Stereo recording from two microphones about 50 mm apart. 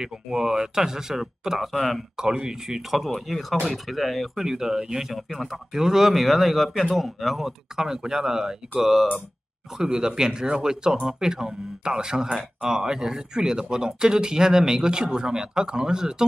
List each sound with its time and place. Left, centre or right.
0.0 s speech: centre
2.1 s speech: centre
3.0 s speech: centre
5.1 s speech: centre
9.8 s speech: centre